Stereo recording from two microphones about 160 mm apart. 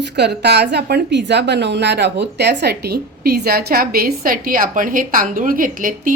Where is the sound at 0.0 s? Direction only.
90° right.